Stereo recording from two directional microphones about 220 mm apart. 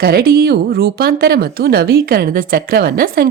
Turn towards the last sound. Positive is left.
turn(degrees=-45)  # may be behind; listen again after turning